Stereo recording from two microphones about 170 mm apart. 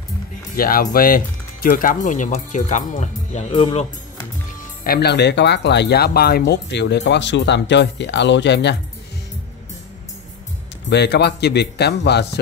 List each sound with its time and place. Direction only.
0.6 s speech: 60° left (ahead or behind); by 3.8 s 35° left (ahead or behind)
4.8 s speech: 70° left (ahead or behind); by 8.7 s 85° left
10.9 s a man's voice: 80° left